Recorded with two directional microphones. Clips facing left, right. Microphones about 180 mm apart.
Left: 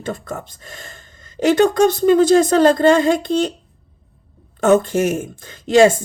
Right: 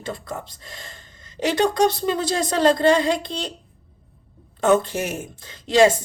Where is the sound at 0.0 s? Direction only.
50° left (ahead or behind).